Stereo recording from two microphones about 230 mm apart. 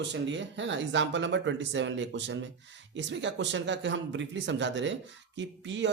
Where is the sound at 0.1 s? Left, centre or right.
Right.